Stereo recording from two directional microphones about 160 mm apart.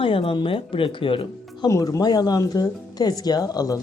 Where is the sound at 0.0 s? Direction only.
35° left (ahead or behind).